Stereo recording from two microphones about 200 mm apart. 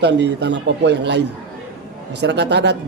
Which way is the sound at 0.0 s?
60° right (ahead or behind).